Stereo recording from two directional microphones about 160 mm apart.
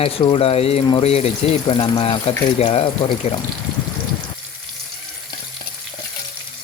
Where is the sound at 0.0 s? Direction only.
35° left (ahead or behind).